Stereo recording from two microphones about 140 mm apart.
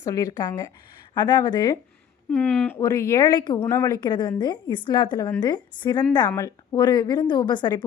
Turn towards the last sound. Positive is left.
turn(degrees=30)  # may be behind; listen again after turning